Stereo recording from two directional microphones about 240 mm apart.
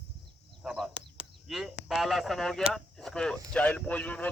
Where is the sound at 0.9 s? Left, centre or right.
Right.